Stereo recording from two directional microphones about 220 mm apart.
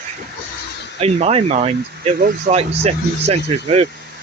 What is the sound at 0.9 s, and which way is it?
Speech, 30° right (ahead or behind).